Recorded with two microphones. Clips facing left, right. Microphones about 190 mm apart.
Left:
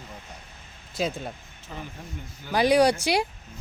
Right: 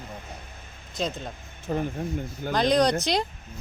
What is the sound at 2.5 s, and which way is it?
Speech, 10° left (ahead or behind).